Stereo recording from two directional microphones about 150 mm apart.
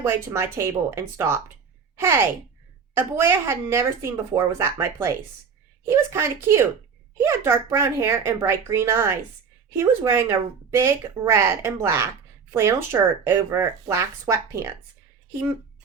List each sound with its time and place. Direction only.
0.0 s speech: 15° right (ahead or behind)